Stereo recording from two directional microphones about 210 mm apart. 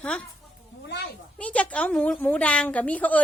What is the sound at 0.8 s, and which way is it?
Speech, 50° left (ahead or behind).